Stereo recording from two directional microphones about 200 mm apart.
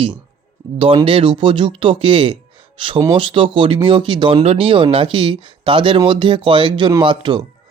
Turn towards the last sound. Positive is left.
turn(degrees=-25)  # may be behind; listen again after turning